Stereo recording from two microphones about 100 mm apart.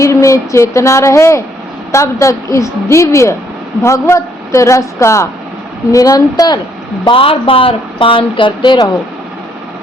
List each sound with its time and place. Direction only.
0.0 s a man's voice: 30° left (ahead or behind)
7.0 s speech: 65° left (ahead or behind)